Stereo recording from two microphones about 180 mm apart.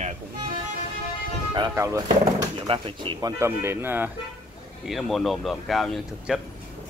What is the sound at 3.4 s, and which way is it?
Speech, 15° right (ahead or behind).